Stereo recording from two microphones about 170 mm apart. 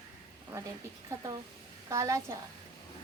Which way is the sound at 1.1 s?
20° right (ahead or behind).